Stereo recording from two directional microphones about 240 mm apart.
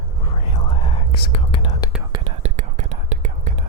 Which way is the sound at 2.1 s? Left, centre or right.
Right.